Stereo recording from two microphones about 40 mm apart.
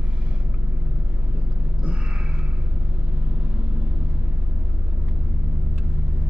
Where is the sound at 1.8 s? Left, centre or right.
Right.